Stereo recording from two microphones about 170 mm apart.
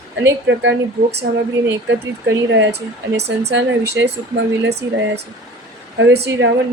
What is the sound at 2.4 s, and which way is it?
Speech, 90° right.